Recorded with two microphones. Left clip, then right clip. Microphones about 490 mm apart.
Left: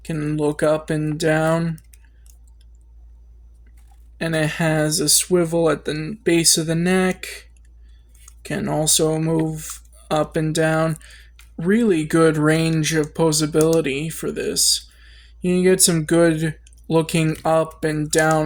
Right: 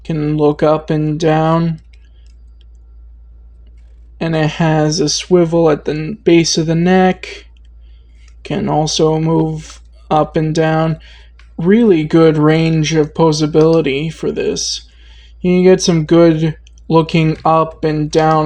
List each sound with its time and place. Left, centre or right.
0.0 s speech: left
4.2 s speech: left
8.4 s speech: left